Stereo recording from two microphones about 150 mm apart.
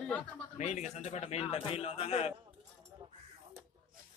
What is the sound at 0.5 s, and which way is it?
A man's voice, 50° left (ahead or behind).